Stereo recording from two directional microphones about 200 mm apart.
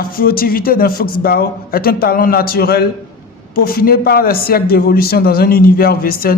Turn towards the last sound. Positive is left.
turn(degrees=45)  # may be behind; listen again after turning